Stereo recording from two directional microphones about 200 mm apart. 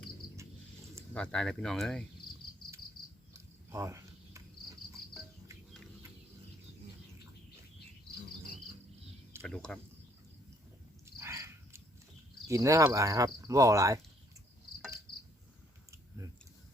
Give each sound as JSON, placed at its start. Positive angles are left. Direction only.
{"t": 1.1, "sound": "speech", "side_deg": 5}
{"t": 3.3, "sound": "a sound", "side_deg": -15}
{"t": 9.4, "sound": "speech", "side_deg": 5}
{"t": 11.0, "sound": "a sound", "side_deg": -15}
{"t": 12.5, "sound": "cricket", "side_deg": -15}
{"t": 15.9, "sound": "chewing", "side_deg": -15}